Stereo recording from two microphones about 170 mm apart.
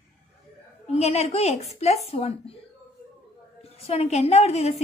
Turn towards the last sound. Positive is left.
turn(degrees=40)  # may be behind; listen again after turning